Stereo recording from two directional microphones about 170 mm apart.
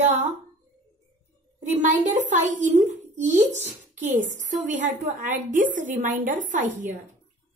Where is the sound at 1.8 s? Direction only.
45° right (ahead or behind).